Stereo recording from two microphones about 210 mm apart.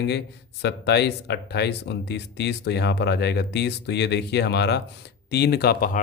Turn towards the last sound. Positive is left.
turn(degrees=45)  # may be behind; listen again after turning